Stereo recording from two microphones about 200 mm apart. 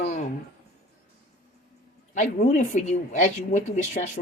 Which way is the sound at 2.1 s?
40° left (ahead or behind).